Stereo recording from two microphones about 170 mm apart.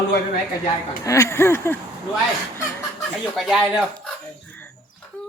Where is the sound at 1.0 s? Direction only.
20° left (ahead or behind).